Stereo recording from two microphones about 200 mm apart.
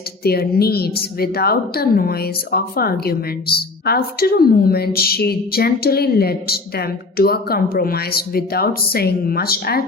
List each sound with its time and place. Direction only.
0.3 s a woman's voice: 50° left (ahead or behind)